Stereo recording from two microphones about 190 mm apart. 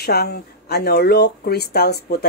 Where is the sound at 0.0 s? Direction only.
55° left (ahead or behind).